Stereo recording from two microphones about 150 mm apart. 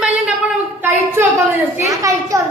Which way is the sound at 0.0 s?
10° right (ahead or behind).